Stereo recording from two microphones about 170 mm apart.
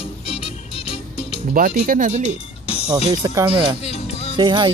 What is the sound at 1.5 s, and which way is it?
Speech, 55° right (ahead or behind).